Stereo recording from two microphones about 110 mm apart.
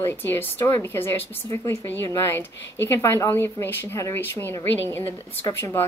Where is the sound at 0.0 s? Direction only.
20° left (ahead or behind).